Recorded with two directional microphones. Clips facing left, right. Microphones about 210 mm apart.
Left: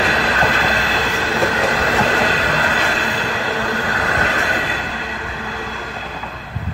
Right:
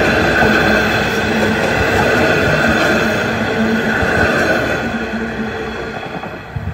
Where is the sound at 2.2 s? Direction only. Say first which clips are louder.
Right 7 dB; 45° right (ahead or behind).